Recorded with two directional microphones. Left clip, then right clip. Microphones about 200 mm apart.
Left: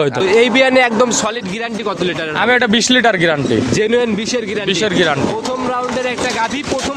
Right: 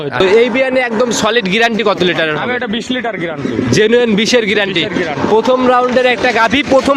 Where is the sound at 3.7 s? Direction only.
20° right (ahead or behind).